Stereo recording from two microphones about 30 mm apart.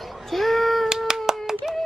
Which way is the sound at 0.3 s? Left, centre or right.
Centre.